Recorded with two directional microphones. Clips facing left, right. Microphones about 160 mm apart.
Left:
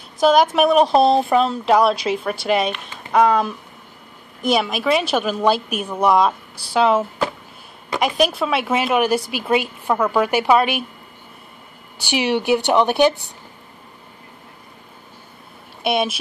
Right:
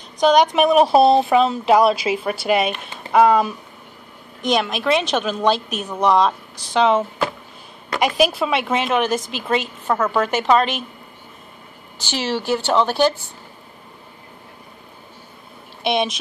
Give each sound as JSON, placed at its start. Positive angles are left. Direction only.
{"t": 0.2, "sound": "a woman's voice", "side_deg": 5}
{"t": 12.0, "sound": "speech", "side_deg": 15}
{"t": 15.8, "sound": "a woman's voice", "side_deg": 5}